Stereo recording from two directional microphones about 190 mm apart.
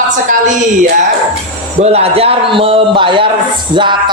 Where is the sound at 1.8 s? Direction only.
35° right (ahead or behind).